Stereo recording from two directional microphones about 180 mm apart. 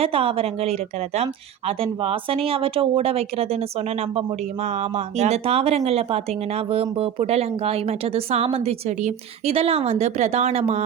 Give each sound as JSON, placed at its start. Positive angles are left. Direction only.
{"t": 0.0, "sound": "a woman's voice", "side_deg": -30}